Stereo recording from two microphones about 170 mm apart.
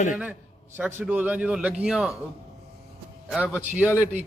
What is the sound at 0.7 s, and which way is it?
A man's voice, 10° right (ahead or behind).